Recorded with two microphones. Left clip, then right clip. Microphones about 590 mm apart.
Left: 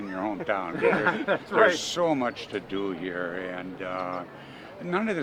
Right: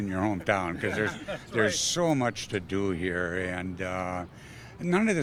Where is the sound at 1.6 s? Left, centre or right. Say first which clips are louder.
Left 4 dB; right.